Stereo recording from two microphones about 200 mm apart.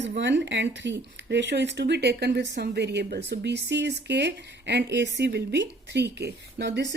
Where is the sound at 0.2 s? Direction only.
60° right (ahead or behind).